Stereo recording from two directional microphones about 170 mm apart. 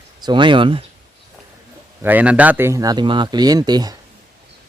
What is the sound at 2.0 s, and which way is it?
A man's voice, 10° right (ahead or behind).